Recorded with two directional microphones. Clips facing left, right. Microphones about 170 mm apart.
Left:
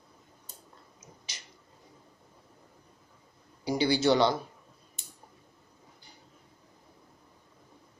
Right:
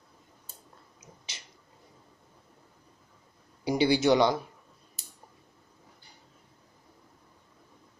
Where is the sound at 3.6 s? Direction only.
20° right (ahead or behind).